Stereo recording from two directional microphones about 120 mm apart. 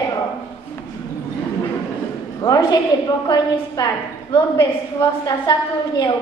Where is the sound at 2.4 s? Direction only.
35° left (ahead or behind).